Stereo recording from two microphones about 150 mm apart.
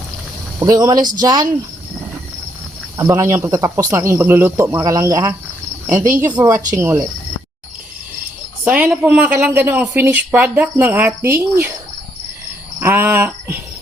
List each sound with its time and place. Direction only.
0.6 s speech: 25° right (ahead or behind)
3.0 s speech: 20° right (ahead or behind)
8.6 s speech: 10° right (ahead or behind)
12.8 s speech: 15° right (ahead or behind)